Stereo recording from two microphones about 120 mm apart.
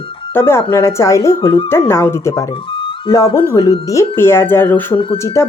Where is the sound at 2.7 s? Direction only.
45° left (ahead or behind).